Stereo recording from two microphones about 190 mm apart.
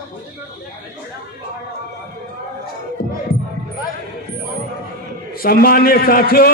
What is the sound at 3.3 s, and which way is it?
Music, 90° left.